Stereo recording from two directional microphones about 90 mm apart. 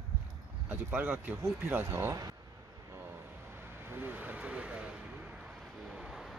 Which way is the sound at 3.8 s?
20° right (ahead or behind).